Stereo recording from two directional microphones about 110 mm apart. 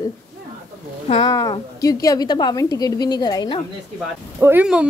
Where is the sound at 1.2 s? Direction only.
35° left (ahead or behind).